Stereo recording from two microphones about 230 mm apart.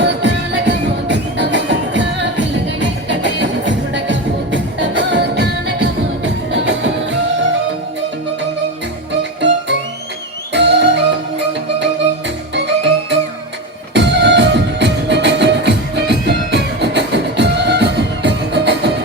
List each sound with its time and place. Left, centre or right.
0.0 s music: right
10.5 s music: right
12.5 s music: right